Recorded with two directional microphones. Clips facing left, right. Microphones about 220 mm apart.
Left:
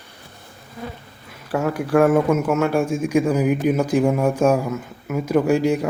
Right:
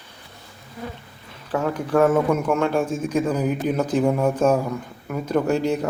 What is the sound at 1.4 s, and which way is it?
Speech, 10° left (ahead or behind).